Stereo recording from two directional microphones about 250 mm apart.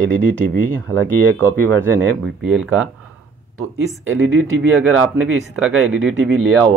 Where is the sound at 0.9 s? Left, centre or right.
Centre.